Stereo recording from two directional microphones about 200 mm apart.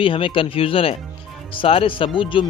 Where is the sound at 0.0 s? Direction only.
25° left (ahead or behind).